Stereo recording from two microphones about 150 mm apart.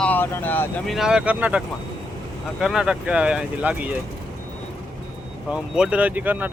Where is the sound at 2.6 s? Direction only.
5° right (ahead or behind).